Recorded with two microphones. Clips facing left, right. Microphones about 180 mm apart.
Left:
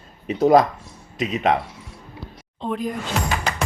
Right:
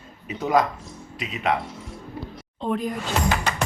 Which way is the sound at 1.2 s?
20° left (ahead or behind).